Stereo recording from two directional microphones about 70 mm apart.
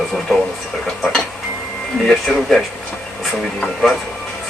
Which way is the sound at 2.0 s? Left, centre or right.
Centre.